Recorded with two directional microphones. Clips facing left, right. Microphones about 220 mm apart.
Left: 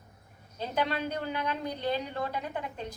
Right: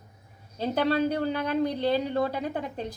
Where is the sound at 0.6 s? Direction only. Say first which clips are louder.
Right 7 dB; 35° right (ahead or behind).